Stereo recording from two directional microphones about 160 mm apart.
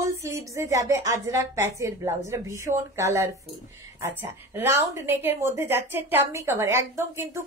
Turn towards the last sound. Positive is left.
turn(degrees=-15)  # may be behind; listen again after turning